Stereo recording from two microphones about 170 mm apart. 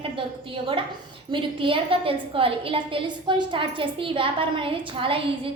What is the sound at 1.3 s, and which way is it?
A woman's voice, 30° right (ahead or behind).